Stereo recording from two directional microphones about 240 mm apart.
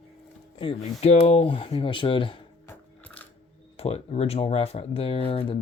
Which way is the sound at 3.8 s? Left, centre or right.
Left.